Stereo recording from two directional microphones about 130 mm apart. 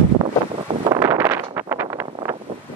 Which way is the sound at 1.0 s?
20° right (ahead or behind).